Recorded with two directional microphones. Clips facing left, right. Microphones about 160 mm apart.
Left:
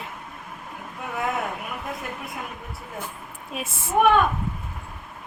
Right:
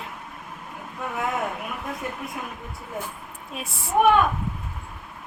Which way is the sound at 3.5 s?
Centre (ahead or behind).